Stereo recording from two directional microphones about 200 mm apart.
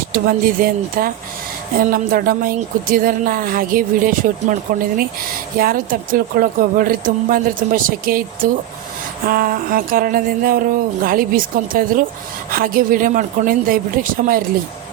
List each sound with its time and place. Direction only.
0.1 s a woman's voice: 45° right (ahead or behind)
9.2 s a woman's voice: 45° right (ahead or behind)